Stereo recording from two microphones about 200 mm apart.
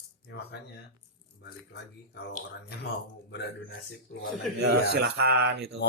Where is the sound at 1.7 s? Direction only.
60° left (ahead or behind).